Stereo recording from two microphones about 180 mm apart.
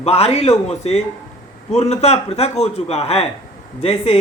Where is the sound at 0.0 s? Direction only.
35° left (ahead or behind).